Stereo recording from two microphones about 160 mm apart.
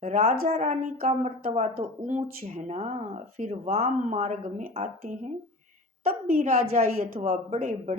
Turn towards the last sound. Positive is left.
turn(degrees=-45)  # may be behind; listen again after turning